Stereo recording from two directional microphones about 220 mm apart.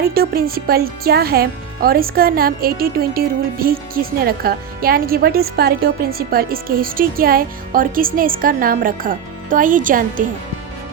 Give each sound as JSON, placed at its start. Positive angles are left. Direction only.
{"t": 0.1, "sound": "speech", "side_deg": -45}